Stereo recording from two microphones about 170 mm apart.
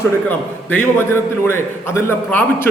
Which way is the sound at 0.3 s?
10° left (ahead or behind).